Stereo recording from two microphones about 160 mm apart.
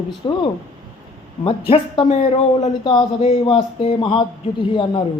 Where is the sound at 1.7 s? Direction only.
35° left (ahead or behind).